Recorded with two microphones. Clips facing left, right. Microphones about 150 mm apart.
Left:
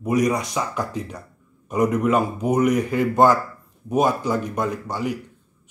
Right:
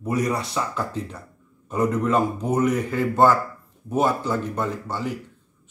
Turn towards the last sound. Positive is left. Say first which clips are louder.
# left 2 dB
turn(degrees=15)  # may be behind; listen again after turning